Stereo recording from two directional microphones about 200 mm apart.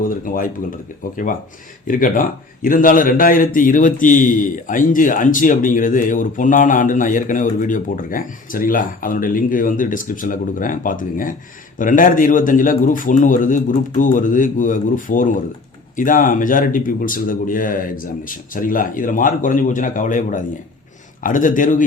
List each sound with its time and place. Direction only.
1.9 s speech: 45° left (ahead or behind)